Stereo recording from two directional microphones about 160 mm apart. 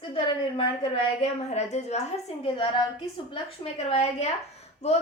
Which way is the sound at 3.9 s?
40° left (ahead or behind).